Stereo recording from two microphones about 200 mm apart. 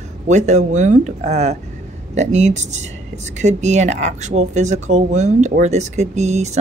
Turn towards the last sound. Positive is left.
turn(degrees=-35)  # may be behind; listen again after turning